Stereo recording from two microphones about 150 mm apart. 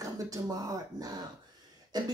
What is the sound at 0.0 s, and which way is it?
Speech, 25° right (ahead or behind).